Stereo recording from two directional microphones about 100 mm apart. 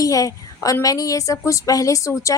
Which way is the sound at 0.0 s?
35° left (ahead or behind).